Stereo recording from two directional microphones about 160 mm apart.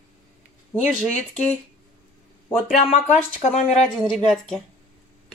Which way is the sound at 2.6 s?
45° left (ahead or behind).